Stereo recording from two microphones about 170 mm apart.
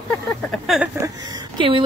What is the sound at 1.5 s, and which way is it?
Speech, 30° right (ahead or behind).